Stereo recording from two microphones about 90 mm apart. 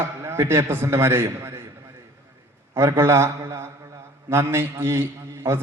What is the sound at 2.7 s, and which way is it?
A man's voice, 30° right (ahead or behind).